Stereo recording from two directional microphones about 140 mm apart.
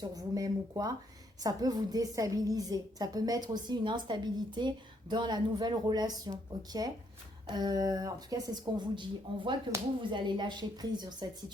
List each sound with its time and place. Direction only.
0.0 s a woman's voice: 25° right (ahead or behind)